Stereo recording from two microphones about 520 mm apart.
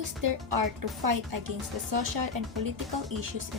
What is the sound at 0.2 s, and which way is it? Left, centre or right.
Speech, right.